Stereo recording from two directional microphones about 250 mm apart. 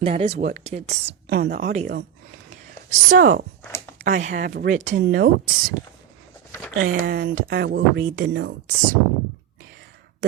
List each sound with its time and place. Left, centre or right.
0.0 s speech: right
1.3 s speech: right
3.1 s speech: right
6.7 s speech: right